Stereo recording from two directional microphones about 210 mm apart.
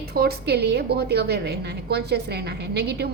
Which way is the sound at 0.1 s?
45° right (ahead or behind).